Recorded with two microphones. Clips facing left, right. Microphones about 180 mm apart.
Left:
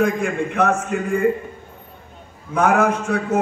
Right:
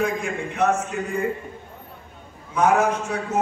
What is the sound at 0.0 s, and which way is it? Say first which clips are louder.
Speech: left 5 dB; 55° left (ahead or behind).